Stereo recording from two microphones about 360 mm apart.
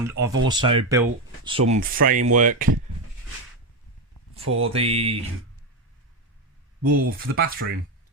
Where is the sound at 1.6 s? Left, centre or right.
Right.